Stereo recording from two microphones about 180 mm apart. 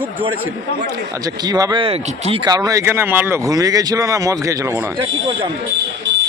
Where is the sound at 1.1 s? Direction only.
20° right (ahead or behind).